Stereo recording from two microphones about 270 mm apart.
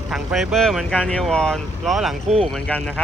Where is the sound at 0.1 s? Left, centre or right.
Centre.